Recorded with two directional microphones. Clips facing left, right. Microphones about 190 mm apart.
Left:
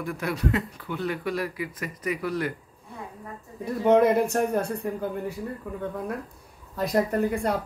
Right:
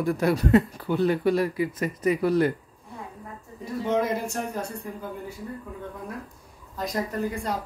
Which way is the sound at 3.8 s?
60° left (ahead or behind).